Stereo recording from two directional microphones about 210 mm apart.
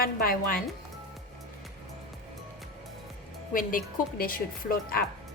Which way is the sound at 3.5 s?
40° left (ahead or behind).